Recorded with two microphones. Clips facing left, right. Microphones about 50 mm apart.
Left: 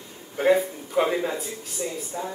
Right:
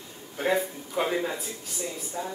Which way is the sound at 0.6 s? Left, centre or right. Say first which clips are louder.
Left 5 dB; centre.